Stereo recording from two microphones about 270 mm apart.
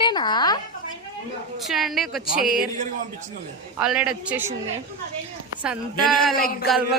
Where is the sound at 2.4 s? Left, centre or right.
Right.